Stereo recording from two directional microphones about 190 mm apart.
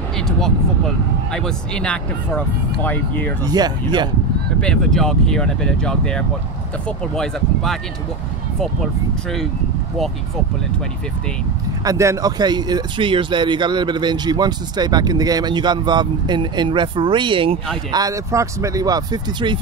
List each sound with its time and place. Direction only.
0.4 s speech: 5° left (ahead or behind)
3.4 s speech: 20° right (ahead or behind)
4.6 s speech: 5° left (ahead or behind)
11.8 s speech: 15° right (ahead or behind)